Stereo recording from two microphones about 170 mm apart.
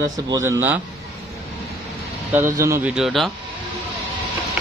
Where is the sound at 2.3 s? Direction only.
15° right (ahead or behind).